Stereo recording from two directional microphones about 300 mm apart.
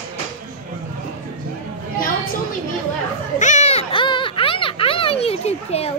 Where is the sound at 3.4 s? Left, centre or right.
Left.